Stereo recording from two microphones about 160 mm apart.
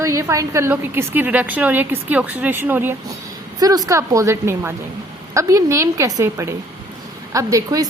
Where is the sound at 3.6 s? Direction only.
25° right (ahead or behind).